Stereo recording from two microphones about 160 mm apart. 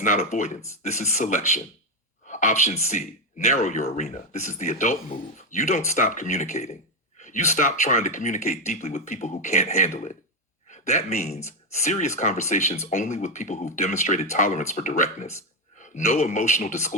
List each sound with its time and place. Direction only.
0.0 s speech: 50° left (ahead or behind)